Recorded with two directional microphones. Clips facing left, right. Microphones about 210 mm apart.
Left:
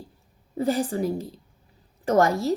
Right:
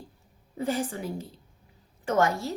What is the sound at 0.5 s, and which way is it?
A woman's voice, 35° left (ahead or behind).